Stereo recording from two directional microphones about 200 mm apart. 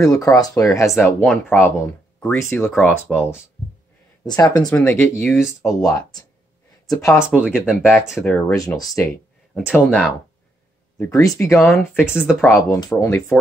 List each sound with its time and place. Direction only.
0.0 s speech: 15° left (ahead or behind)
4.7 s speech: 10° left (ahead or behind)
7.2 s speech: 5° right (ahead or behind)
8.2 s speech: 10° left (ahead or behind)
9.5 s speech: 5° left (ahead or behind)
11.0 s speech: 15° left (ahead or behind); by 12.4 s 5° right (ahead or behind)
12.4 s speech: 10° left (ahead or behind)